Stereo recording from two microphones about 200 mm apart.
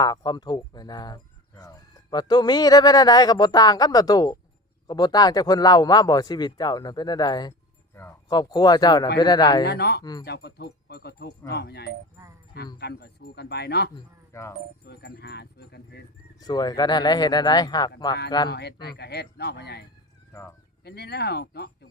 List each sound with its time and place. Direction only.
0.0 s speech: 20° left (ahead or behind)
9.6 s speech: 55° left (ahead or behind)
10.0 s speech: 20° left (ahead or behind)
10.2 s speech: 55° left (ahead or behind)
12.1 s speech: 15° right (ahead or behind)
12.8 s speech: 55° left (ahead or behind)
13.9 s speech: 15° left (ahead or behind)
14.8 s speech: 55° left (ahead or behind)
16.4 s speech: 20° left (ahead or behind)
18.5 s speech: 55° left (ahead or behind)
20.3 s speech: 15° left (ahead or behind)
20.8 s speech: 55° left (ahead or behind)